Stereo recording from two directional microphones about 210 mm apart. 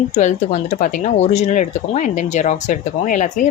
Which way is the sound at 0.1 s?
35° left (ahead or behind).